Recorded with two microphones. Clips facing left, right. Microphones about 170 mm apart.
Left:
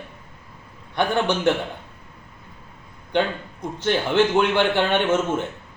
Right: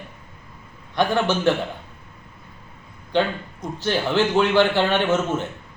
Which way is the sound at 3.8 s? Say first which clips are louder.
Left 1 dB; 20° left (ahead or behind).